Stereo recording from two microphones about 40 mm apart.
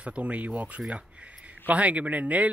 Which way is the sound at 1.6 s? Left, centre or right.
Right.